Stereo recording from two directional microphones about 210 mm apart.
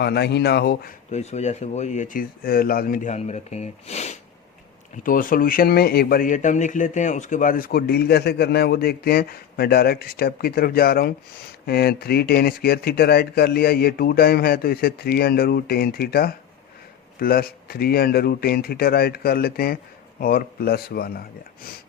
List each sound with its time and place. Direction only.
0.0 s a man's voice: 50° left (ahead or behind)
1.1 s a man's voice: 30° left (ahead or behind)